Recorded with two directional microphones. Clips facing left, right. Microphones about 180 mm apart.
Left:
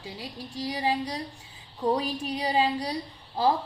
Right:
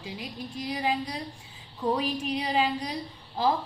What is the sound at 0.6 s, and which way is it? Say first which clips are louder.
A woman's voice: left 1 dB; 35° left (ahead or behind).